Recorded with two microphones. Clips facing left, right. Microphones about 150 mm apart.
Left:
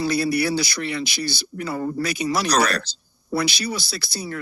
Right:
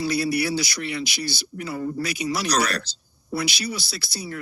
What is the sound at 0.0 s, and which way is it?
Speech, 55° left (ahead or behind).